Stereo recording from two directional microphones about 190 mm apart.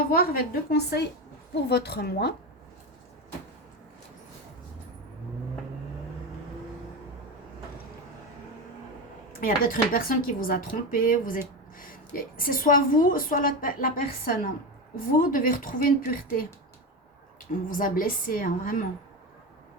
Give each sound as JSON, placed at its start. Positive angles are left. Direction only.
{"t": 0.1, "sound": "a woman's voice", "side_deg": 50}
{"t": 9.4, "sound": "speech", "side_deg": 50}
{"t": 17.7, "sound": "speech", "side_deg": 45}